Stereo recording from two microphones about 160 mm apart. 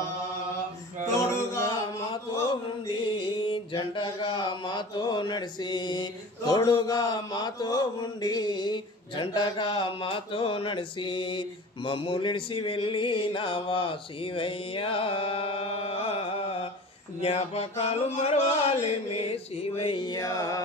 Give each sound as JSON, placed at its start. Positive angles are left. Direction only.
{"t": 1.5, "sound": "music", "side_deg": 20}
{"t": 2.9, "sound": "mantra", "side_deg": 30}
{"t": 16.0, "sound": "carnatic music", "side_deg": 35}
{"t": 17.2, "sound": "mantra", "side_deg": 40}
{"t": 20.1, "sound": "music", "side_deg": 20}